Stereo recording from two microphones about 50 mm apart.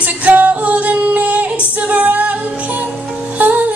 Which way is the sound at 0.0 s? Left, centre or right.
Right.